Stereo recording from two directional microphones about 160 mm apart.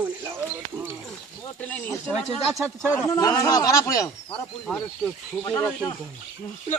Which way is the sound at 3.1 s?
20° left (ahead or behind).